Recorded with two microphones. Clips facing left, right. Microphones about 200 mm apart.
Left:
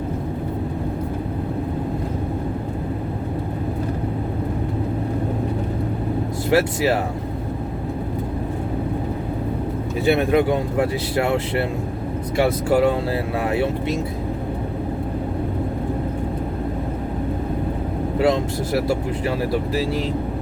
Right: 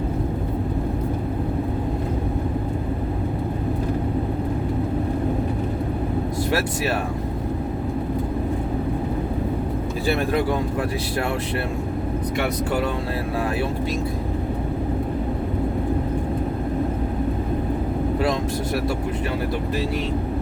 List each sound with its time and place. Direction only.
6.5 s speech: 25° left (ahead or behind)
10.1 s speech: 20° left (ahead or behind)
18.2 s speech: 25° left (ahead or behind)